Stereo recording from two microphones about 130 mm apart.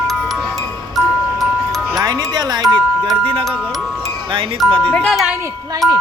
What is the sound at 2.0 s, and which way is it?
Music, 30° right (ahead or behind).